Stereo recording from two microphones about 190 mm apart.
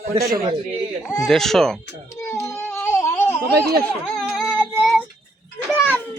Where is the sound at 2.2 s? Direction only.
15° left (ahead or behind).